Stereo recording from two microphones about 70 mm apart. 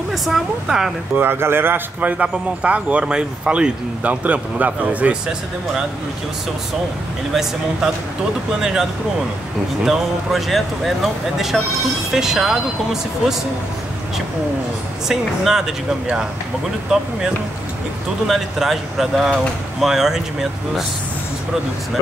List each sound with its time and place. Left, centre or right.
0.1 s speech: centre
1.1 s speech: right
8.5 s speech: centre
9.8 s speech: centre
15.0 s speech: centre
18.2 s speech: centre